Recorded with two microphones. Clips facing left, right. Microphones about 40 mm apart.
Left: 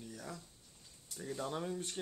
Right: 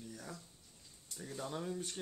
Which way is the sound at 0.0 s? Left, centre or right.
Centre.